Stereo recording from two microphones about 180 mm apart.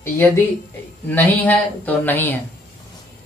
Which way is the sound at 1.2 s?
10° left (ahead or behind).